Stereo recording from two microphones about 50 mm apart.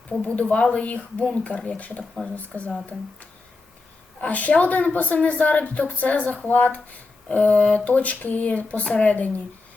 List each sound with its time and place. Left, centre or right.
0.2 s a woman's voice: left
4.2 s a woman's voice: left